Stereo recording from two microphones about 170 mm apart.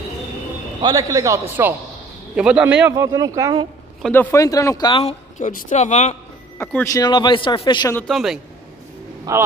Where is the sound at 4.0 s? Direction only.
5° left (ahead or behind).